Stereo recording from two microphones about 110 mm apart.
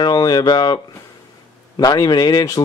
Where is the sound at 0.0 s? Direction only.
40° left (ahead or behind).